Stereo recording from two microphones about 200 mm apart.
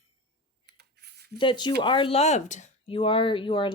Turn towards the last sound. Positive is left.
turn(degrees=25)  # may be behind; listen again after turning